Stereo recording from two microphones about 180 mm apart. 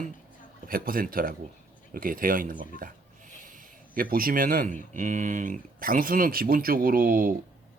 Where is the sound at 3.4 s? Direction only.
50° right (ahead or behind).